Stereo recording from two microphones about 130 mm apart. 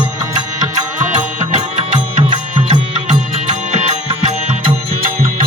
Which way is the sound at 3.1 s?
75° right (ahead or behind).